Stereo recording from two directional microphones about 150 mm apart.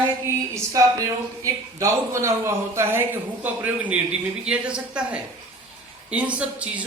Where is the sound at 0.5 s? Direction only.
20° right (ahead or behind).